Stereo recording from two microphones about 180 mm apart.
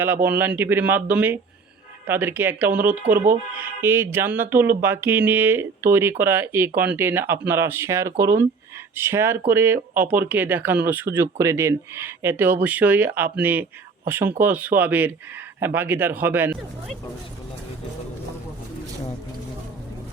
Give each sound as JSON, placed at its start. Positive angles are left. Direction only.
{"t": 0.0, "sound": "speech", "side_deg": -10}